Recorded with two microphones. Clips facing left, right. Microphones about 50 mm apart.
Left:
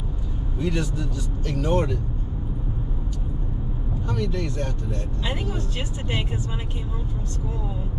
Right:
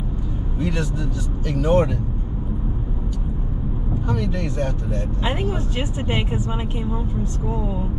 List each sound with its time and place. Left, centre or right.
0.6 s speech: centre
4.1 s speech: centre
7.5 s speech: centre